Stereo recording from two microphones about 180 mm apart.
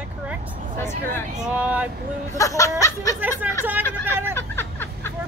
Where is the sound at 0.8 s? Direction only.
15° left (ahead or behind).